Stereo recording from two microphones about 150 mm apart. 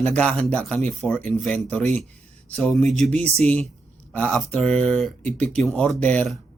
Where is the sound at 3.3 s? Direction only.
45° right (ahead or behind).